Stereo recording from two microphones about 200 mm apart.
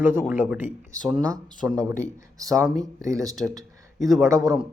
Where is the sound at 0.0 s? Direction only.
10° right (ahead or behind).